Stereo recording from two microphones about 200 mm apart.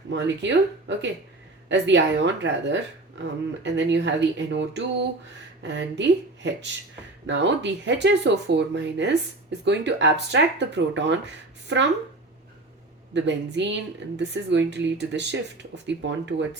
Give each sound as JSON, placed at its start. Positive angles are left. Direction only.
{"t": 0.1, "sound": "speech", "side_deg": -65}
{"t": 13.1, "sound": "speech", "side_deg": -65}